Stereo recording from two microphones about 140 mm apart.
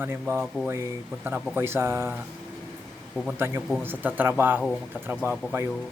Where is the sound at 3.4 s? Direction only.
15° right (ahead or behind).